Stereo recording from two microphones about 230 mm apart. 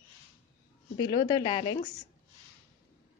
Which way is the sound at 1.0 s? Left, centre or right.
Centre.